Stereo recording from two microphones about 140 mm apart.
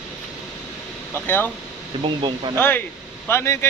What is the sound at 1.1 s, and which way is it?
Speech, 15° left (ahead or behind).